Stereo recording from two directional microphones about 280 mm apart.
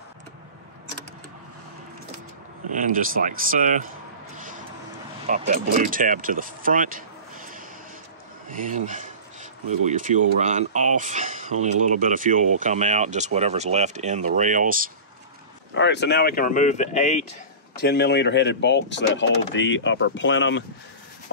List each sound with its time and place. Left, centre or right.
2.7 s speech: right
5.2 s speech: right
8.5 s speech: right
15.7 s speech: left
17.8 s speech: left